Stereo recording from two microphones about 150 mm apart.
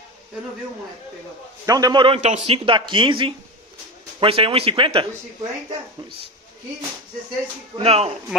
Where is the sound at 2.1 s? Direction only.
50° right (ahead or behind); by 5.0 s 35° right (ahead or behind).